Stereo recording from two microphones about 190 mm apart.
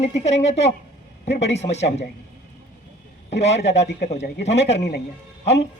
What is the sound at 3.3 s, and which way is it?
Speech, 35° left (ahead or behind).